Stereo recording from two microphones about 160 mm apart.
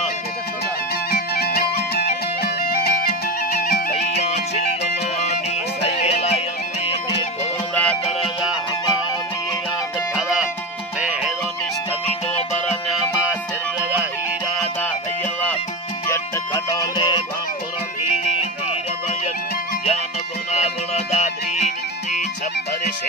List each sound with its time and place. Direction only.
1.1 s music: 80° left
4.2 s music: 45° left (ahead or behind)
7.7 s music: 10° left (ahead or behind)
10.1 s music: 5° right (ahead or behind)
12.9 s music: 10° right (ahead or behind)
16.1 s music: 20° left (ahead or behind)
20.5 s music: 40° left (ahead or behind)